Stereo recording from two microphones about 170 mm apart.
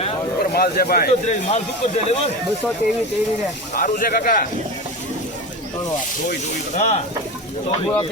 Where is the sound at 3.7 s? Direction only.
55° left (ahead or behind).